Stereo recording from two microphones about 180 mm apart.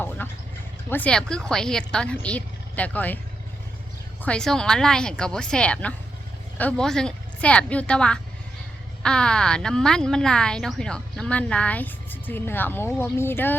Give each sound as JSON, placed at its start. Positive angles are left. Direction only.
{"t": 0.2, "sound": "duck", "side_deg": 10}
{"t": 0.9, "sound": "a woman's voice", "side_deg": 10}
{"t": 4.2, "sound": "speech", "side_deg": 5}